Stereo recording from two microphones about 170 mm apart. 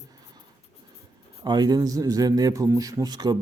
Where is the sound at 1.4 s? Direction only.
25° right (ahead or behind).